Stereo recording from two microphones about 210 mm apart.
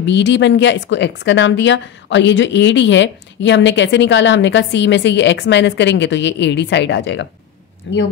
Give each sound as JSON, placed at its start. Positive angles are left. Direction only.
{"t": 0.0, "sound": "a woman's voice", "side_deg": 55}